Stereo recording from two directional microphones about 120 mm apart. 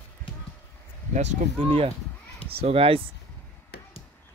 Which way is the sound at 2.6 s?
50° right (ahead or behind).